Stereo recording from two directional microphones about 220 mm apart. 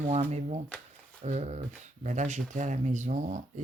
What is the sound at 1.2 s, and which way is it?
Speech, 30° right (ahead or behind).